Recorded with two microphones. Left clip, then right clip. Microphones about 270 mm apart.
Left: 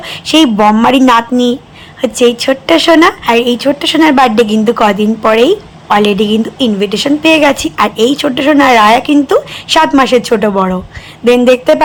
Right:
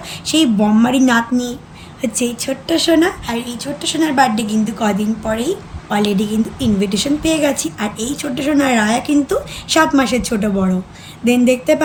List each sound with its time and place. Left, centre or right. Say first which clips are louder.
0.0 s a woman's voice: left 7 dB; centre
6.1 s a woman's voice: left 8 dB; centre